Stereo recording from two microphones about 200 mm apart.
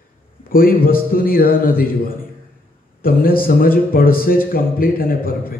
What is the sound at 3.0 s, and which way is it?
Speech, 45° left (ahead or behind).